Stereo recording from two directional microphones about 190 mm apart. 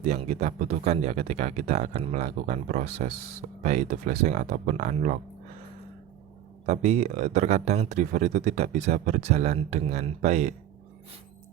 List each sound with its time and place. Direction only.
0.0 s speech: 35° right (ahead or behind)
6.7 s speech: 35° right (ahead or behind)